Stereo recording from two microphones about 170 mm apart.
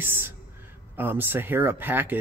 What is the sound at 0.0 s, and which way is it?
Speech, 10° right (ahead or behind).